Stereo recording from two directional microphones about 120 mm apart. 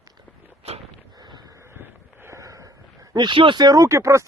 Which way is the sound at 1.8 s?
20° right (ahead or behind).